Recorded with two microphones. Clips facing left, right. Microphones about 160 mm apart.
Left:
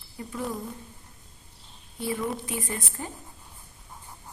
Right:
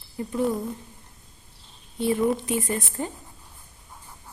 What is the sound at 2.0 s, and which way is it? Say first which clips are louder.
A woman's voice: right 7 dB; 20° right (ahead or behind).